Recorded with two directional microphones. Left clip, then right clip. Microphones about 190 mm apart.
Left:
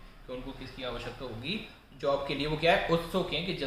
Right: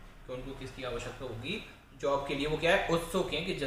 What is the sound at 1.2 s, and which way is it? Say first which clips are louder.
Speech: even; 20° left (ahead or behind).